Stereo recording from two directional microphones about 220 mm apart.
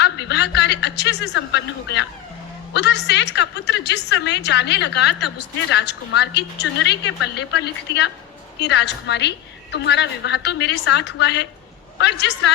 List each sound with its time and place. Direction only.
0.0 s a man's voice: 50° left (ahead or behind)